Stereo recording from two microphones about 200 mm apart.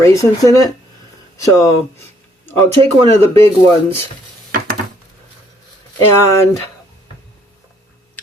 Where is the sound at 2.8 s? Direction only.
30° right (ahead or behind).